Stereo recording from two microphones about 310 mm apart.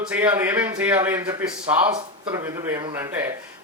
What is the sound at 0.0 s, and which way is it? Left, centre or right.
A man's voice, centre.